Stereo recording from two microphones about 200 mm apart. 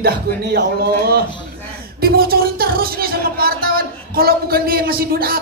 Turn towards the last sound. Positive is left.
turn(degrees=-50)  # may be behind; listen again after turning